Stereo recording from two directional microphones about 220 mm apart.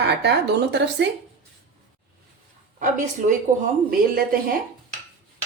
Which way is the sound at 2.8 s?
35° right (ahead or behind).